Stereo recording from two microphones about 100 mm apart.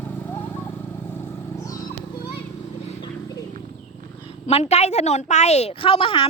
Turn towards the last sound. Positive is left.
turn(degrees=60)  # may be behind; listen again after turning